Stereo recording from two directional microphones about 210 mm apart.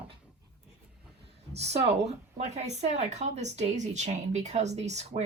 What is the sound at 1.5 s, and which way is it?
Speech, 30° right (ahead or behind).